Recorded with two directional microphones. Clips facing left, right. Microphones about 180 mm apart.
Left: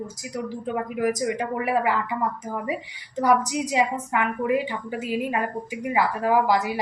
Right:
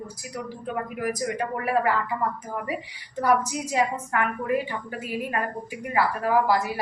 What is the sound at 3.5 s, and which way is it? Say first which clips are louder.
A woman's voice: left 2 dB; 15° left (ahead or behind).